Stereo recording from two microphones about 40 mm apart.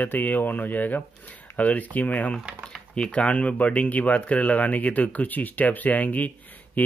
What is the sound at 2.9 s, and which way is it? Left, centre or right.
Speech, left.